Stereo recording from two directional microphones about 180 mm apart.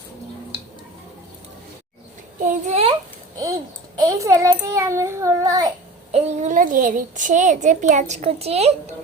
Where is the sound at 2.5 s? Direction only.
35° right (ahead or behind).